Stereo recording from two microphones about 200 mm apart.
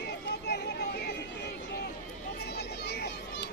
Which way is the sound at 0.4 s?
55° left (ahead or behind).